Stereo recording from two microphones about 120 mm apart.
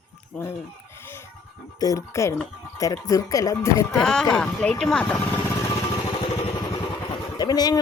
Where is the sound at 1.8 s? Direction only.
25° left (ahead or behind).